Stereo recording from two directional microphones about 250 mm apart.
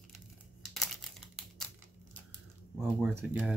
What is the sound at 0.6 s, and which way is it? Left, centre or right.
Crumpling, centre.